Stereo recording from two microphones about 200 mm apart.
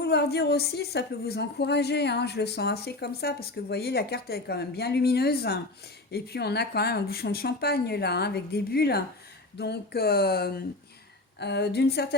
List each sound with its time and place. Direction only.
0.0 s a woman's voice: 55° left (ahead or behind)